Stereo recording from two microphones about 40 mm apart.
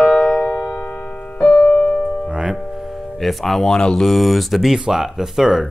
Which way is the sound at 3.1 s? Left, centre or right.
Centre.